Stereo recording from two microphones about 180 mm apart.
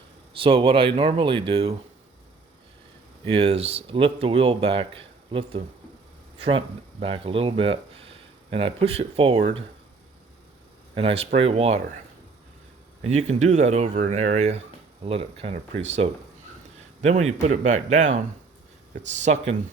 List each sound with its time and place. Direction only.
0.3 s speech: 30° right (ahead or behind)
3.2 s speech: 35° right (ahead or behind)
10.9 s speech: 35° right (ahead or behind)
13.0 s speech: 40° right (ahead or behind)